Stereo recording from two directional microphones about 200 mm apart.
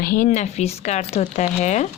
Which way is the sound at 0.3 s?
35° left (ahead or behind).